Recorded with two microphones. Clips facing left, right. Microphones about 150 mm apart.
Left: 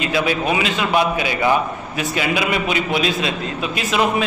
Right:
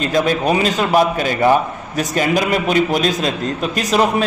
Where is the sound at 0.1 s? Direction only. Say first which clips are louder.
Right 4 dB; 40° right (ahead or behind).